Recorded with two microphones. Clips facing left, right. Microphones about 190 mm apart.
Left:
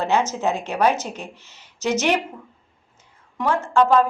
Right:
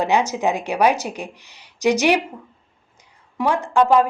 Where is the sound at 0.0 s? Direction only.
15° right (ahead or behind).